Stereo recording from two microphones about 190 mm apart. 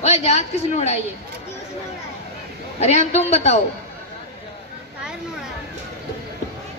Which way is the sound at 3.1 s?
35° left (ahead or behind).